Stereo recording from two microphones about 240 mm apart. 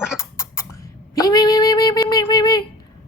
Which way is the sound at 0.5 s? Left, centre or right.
Centre.